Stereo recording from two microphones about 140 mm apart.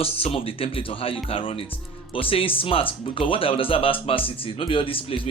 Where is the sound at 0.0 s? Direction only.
45° left (ahead or behind).